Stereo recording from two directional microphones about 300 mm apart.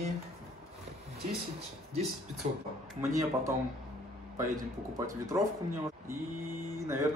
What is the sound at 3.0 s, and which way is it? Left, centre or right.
Speech, centre.